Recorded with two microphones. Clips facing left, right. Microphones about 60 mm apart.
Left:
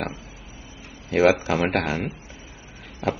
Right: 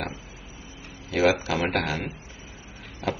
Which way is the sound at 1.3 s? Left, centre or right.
Left.